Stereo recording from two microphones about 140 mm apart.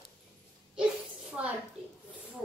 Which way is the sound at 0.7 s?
5° right (ahead or behind).